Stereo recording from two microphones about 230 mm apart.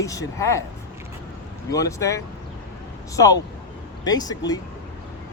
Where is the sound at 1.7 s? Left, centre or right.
Centre.